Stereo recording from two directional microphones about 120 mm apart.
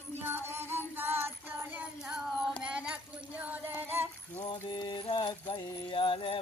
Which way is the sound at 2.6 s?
10° right (ahead or behind).